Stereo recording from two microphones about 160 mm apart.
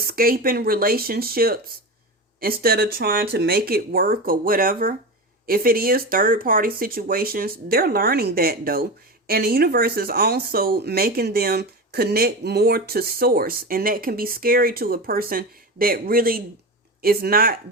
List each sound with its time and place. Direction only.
0.1 s speech: 65° right (ahead or behind)